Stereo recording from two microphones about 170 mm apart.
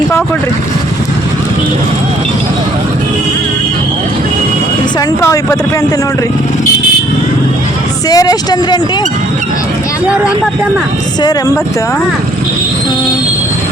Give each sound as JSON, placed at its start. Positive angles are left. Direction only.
{"t": 4.9, "sound": "speech", "side_deg": 15}
{"t": 8.1, "sound": "speech", "side_deg": 20}
{"t": 11.2, "sound": "speech", "side_deg": 25}